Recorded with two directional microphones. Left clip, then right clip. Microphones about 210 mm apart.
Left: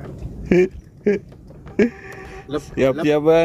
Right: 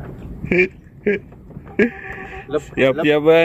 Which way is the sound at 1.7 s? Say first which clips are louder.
Right 1 dB; 15° left (ahead or behind).